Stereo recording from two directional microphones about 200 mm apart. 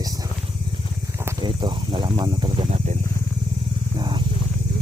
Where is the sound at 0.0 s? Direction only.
20° right (ahead or behind).